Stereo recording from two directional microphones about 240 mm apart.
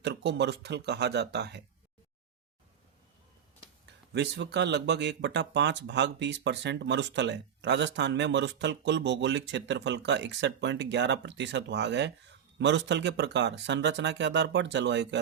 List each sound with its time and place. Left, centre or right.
0.0 s speech: right
3.8 s speech: right